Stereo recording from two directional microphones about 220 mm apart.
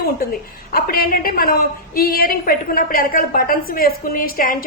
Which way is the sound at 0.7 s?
45° left (ahead or behind).